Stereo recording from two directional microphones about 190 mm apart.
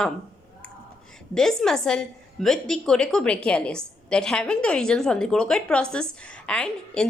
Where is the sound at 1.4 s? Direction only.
Centre (ahead or behind).